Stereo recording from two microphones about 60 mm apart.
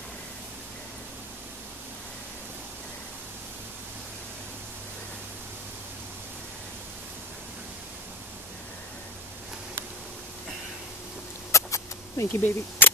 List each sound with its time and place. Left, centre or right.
11.5 s rodents: left
12.3 s speech: left